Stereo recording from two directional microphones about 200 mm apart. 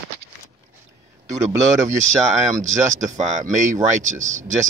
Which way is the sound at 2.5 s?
40° right (ahead or behind).